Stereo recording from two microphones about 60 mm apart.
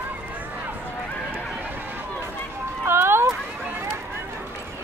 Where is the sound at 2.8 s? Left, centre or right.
Right.